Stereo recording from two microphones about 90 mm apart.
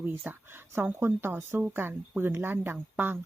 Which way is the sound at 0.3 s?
15° right (ahead or behind).